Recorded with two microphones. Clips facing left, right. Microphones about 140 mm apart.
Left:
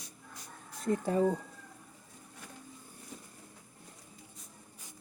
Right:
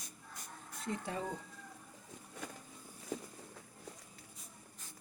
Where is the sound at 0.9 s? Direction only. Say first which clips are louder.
Left 11 dB; 40° left (ahead or behind).